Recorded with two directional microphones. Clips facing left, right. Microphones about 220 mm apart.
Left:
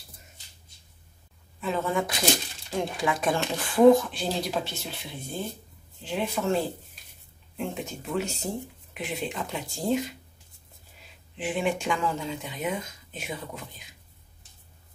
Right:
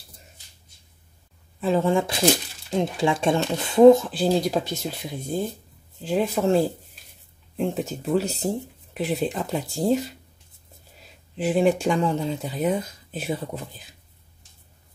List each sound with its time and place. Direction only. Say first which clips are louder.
1.6 s speech: right 6 dB; 30° right (ahead or behind)
11.3 s speech: right 8 dB; 40° right (ahead or behind)